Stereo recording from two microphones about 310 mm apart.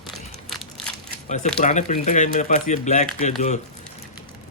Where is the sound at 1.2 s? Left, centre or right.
Left.